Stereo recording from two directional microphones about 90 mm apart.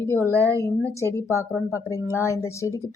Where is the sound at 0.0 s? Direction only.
25° left (ahead or behind).